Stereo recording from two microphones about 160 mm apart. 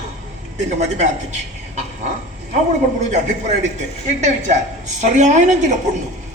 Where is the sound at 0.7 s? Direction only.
45° right (ahead or behind).